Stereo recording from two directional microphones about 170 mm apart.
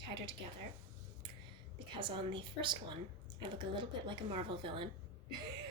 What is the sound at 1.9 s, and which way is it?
A woman's voice, 30° right (ahead or behind).